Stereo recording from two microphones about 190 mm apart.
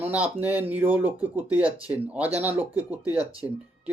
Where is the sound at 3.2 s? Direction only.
20° left (ahead or behind).